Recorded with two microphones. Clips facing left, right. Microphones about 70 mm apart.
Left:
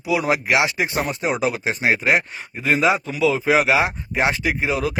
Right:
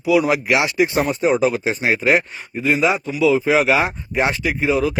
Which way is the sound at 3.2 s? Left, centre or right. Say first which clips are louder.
Right 4 dB; left.